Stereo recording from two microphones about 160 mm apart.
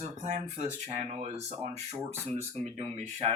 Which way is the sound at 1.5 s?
15° right (ahead or behind).